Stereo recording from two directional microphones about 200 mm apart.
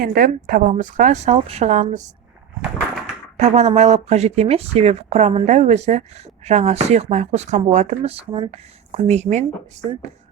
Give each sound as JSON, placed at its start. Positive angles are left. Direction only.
{"t": 0.0, "sound": "speech", "side_deg": -45}
{"t": 3.3, "sound": "speech", "side_deg": -35}